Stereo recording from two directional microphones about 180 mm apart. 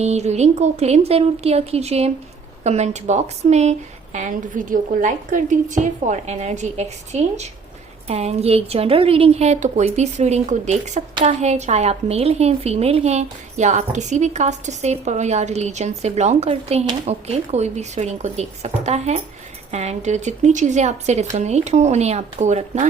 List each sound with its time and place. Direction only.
0.0 s a woman's voice: 35° right (ahead or behind)